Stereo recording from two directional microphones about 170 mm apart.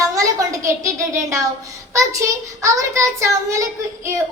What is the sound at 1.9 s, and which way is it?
A child's voice, 20° right (ahead or behind).